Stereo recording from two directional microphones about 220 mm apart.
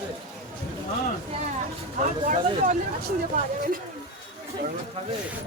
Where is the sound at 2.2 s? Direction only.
35° right (ahead or behind).